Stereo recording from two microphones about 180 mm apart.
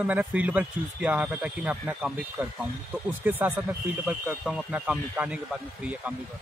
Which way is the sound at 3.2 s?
10° right (ahead or behind).